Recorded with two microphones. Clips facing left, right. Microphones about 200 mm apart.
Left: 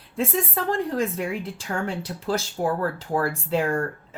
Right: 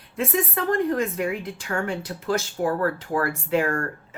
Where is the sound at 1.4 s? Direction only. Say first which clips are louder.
Right 1 dB; 30° left (ahead or behind).